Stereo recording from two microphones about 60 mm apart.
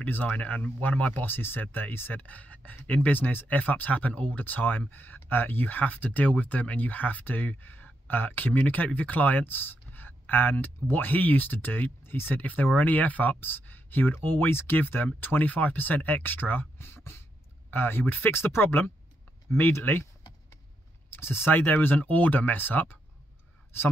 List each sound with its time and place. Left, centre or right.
0.0 s speech: left
21.1 s speech: left